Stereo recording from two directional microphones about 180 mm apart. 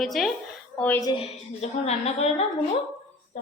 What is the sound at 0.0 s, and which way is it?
A woman's voice, centre (ahead or behind).